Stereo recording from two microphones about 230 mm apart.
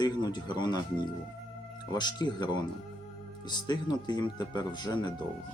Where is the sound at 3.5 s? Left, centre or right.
Centre.